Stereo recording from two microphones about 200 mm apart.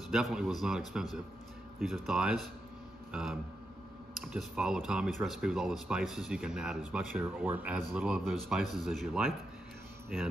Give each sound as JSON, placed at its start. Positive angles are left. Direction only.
{"t": 0.1, "sound": "speech", "side_deg": 0}
{"t": 2.0, "sound": "speech", "side_deg": 0}